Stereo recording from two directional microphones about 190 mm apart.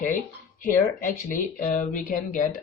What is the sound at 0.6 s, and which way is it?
Speech, 45° left (ahead or behind).